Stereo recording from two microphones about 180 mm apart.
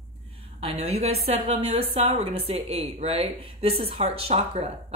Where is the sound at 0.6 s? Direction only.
35° right (ahead or behind).